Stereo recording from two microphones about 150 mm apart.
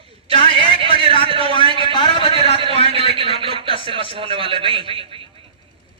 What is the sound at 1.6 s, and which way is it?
Speech, 35° right (ahead or behind).